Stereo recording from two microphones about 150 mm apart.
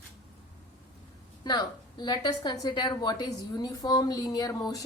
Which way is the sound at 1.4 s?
30° left (ahead or behind).